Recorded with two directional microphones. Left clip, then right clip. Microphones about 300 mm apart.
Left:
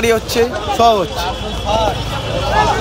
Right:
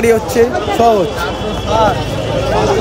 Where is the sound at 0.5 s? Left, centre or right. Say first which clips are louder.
Right 3 dB; centre.